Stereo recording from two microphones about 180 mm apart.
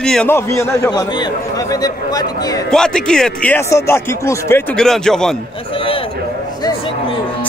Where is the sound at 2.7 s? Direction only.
5° left (ahead or behind).